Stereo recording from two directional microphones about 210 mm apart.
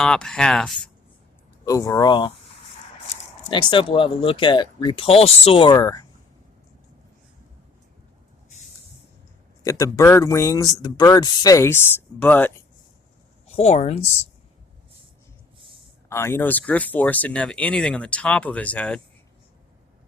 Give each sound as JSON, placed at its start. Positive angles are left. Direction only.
{"t": 0.0, "sound": "speech", "side_deg": 5}
{"t": 1.6, "sound": "speech", "side_deg": 15}
{"t": 3.4, "sound": "speech", "side_deg": 20}
{"t": 9.6, "sound": "speech", "side_deg": 15}
{"t": 13.6, "sound": "speech", "side_deg": 30}
{"t": 16.0, "sound": "speech", "side_deg": 10}